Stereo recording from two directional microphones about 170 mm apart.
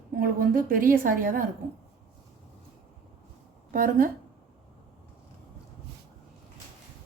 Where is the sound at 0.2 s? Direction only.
55° right (ahead or behind).